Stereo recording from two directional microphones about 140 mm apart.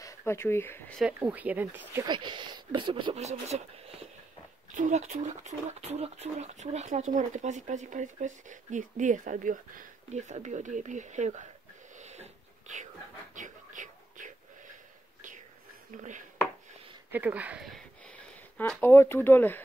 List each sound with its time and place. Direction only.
0.0 s speech: 20° left (ahead or behind)
0.9 s speech: 10° right (ahead or behind)
2.0 s speech: 35° right (ahead or behind)
3.2 s speech: 50° right (ahead or behind)
12.0 s a sound: 55° right (ahead or behind)
15.9 s speech: 60° right (ahead or behind)
17.1 s speech: 10° right (ahead or behind)
17.6 s a sound: 5° left (ahead or behind)
18.6 s speech: 15° left (ahead or behind)